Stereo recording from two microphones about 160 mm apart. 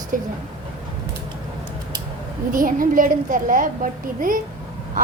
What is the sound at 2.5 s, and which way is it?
A child's voice, 60° right (ahead or behind).